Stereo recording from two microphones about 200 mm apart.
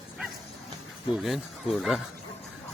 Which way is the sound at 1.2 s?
Centre (ahead or behind).